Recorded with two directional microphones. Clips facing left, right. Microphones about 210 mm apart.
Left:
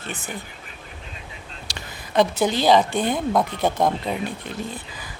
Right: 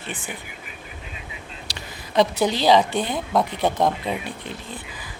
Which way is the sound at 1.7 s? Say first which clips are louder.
Left 2 dB; 50° left (ahead or behind).